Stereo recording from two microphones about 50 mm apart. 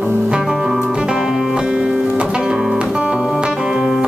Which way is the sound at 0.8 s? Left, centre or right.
Centre.